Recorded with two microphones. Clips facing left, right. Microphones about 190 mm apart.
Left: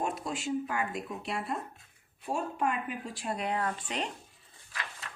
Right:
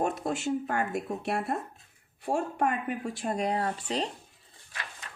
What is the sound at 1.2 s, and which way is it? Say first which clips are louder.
Speech: right 4 dB; 60° right (ahead or behind).